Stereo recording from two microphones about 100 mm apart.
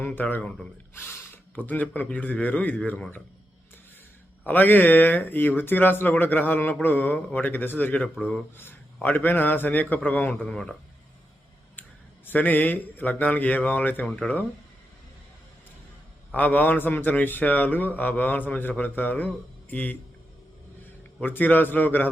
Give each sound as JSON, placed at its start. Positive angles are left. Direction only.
{"t": 0.0, "sound": "a man's voice", "side_deg": 15}
{"t": 0.9, "sound": "speech", "side_deg": 25}
{"t": 4.4, "sound": "a man's voice", "side_deg": 20}
{"t": 11.8, "sound": "a man's voice", "side_deg": 20}
{"t": 16.3, "sound": "a man's voice", "side_deg": 15}
{"t": 21.2, "sound": "a man's voice", "side_deg": 20}